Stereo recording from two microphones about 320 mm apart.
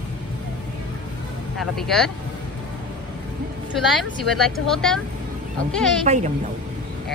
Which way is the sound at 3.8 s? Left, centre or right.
Centre.